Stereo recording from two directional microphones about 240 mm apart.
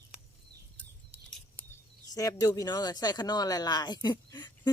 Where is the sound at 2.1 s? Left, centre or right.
Centre.